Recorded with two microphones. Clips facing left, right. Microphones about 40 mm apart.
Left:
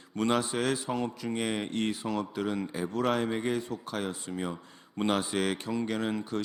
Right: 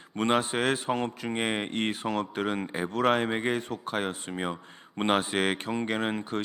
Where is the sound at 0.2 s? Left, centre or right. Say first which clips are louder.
Right 2 dB; right.